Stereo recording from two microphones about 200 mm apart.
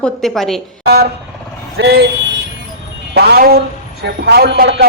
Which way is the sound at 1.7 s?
55° right (ahead or behind).